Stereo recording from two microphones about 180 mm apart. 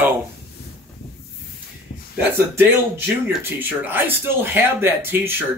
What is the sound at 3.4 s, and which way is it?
Speech, 10° right (ahead or behind).